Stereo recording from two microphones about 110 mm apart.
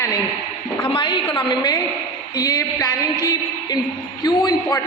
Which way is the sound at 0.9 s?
45° left (ahead or behind).